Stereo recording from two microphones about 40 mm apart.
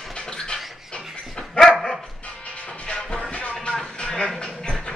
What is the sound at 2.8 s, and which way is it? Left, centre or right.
Music, left.